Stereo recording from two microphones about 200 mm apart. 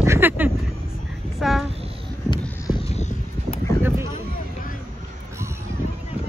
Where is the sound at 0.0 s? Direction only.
10° right (ahead or behind).